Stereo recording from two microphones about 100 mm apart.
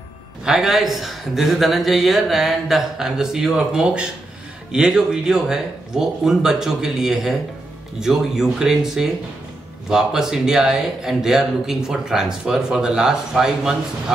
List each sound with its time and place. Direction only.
0.5 s speech: 5° right (ahead or behind)